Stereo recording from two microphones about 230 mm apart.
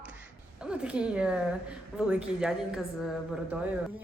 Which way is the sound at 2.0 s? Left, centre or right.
Centre.